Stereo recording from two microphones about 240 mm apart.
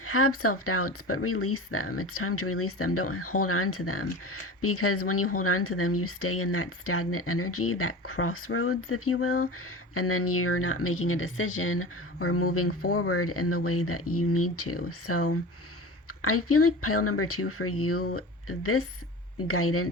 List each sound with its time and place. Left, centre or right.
0.0 s speech: left